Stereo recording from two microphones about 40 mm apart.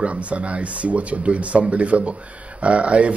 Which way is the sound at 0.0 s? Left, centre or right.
Right.